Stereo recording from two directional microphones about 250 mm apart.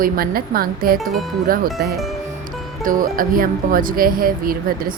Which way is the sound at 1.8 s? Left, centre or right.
Right.